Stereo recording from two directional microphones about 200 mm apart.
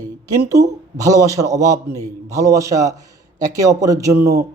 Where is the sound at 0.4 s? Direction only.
15° right (ahead or behind).